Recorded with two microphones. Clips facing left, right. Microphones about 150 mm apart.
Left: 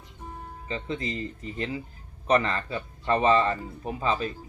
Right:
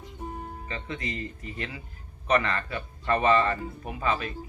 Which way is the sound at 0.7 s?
25° left (ahead or behind).